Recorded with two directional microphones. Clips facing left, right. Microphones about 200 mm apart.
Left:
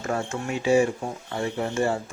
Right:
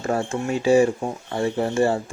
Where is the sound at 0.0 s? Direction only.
30° right (ahead or behind).